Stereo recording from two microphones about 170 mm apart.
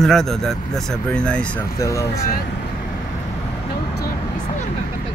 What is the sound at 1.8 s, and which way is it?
Speech, 15° left (ahead or behind).